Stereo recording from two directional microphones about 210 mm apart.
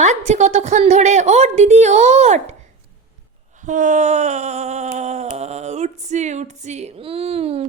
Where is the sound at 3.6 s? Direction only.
35° right (ahead or behind).